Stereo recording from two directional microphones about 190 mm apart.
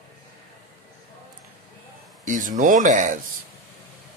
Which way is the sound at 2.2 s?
45° right (ahead or behind).